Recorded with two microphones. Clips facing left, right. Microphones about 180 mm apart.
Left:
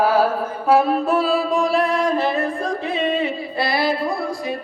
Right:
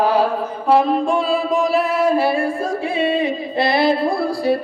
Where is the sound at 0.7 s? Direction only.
10° left (ahead or behind); by 4.5 s 25° right (ahead or behind).